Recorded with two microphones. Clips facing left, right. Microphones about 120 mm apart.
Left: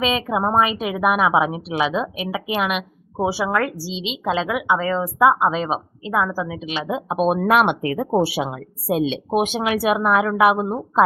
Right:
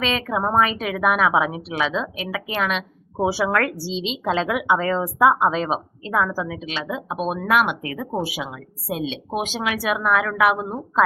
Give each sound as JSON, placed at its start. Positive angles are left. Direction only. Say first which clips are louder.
{"t": 0.0, "sound": "a woman's voice", "louder": "left 2 dB", "side_deg": 10}